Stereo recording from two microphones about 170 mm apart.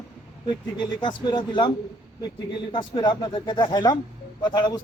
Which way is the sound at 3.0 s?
25° left (ahead or behind).